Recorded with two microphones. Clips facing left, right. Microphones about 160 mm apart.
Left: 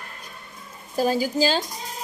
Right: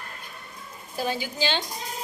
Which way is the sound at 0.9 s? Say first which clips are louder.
Left 8 dB; 40° left (ahead or behind).